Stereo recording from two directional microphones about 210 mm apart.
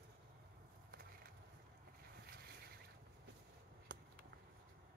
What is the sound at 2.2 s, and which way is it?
Vehicle, 45° right (ahead or behind).